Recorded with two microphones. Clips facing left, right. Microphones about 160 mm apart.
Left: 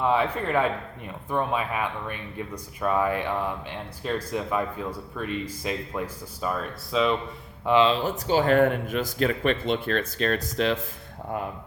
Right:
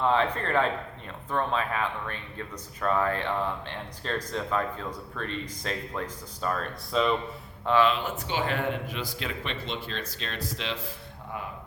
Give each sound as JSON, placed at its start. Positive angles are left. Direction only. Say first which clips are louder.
{"t": 0.0, "sound": "speech", "louder": "left 1 dB", "side_deg": 10}
{"t": 7.6, "sound": "speech", "louder": "left 3 dB", "side_deg": 15}
{"t": 7.9, "sound": "speech", "louder": "left 4 dB", "side_deg": 35}